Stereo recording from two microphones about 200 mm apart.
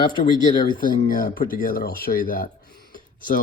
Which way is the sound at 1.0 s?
45° left (ahead or behind).